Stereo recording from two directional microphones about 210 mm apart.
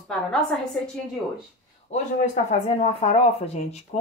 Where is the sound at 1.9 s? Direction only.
35° left (ahead or behind).